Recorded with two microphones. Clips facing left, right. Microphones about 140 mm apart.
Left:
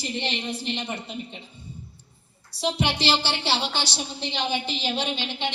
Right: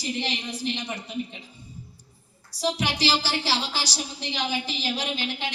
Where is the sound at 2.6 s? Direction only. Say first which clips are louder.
Left 1 dB; 25° left (ahead or behind).